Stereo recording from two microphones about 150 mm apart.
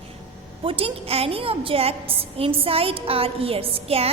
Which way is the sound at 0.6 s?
40° right (ahead or behind).